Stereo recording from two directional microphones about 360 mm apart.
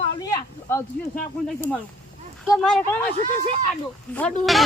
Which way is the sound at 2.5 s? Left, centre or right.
Centre.